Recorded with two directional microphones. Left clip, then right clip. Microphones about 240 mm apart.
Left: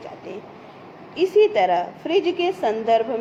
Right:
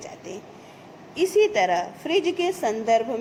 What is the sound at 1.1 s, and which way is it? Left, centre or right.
A woman's voice, right.